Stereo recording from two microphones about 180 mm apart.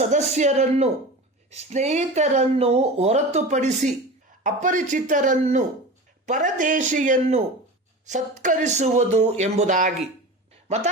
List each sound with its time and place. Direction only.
0.1 s speech: 40° right (ahead or behind)